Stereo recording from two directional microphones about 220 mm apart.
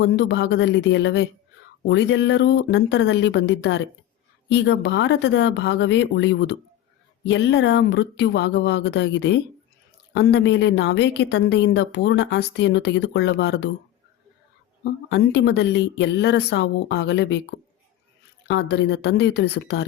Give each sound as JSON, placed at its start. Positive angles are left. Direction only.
{"t": 0.0, "sound": "speech", "side_deg": 50}
{"t": 15.1, "sound": "speech", "side_deg": 50}
{"t": 18.4, "sound": "speech", "side_deg": 50}